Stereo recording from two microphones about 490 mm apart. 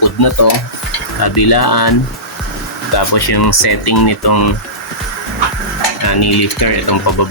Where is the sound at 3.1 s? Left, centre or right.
Left.